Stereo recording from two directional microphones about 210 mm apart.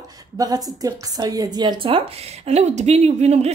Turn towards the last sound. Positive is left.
turn(degrees=-30)  # may be behind; listen again after turning